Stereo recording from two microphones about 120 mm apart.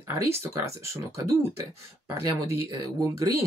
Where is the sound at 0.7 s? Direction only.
20° right (ahead or behind).